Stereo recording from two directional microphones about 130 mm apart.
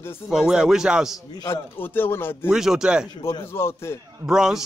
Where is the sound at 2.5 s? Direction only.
5° right (ahead or behind).